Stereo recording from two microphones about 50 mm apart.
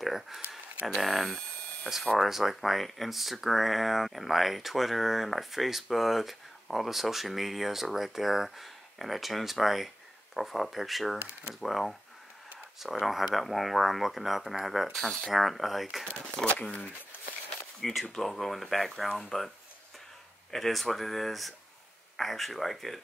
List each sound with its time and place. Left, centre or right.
0.0 s speech: centre
15.0 s speech: centre
16.5 s speech: centre
17.7 s speech: centre
20.5 s speech: centre